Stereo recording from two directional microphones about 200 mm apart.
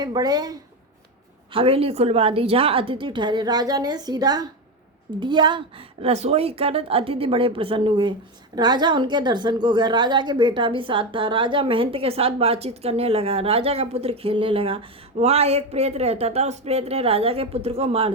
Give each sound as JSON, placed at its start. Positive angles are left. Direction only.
{"t": 0.0, "sound": "a woman's voice", "side_deg": -20}